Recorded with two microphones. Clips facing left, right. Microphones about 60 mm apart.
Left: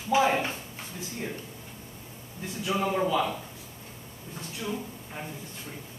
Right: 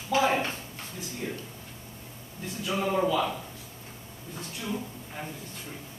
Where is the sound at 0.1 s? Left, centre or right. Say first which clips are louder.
Left 2 dB; centre.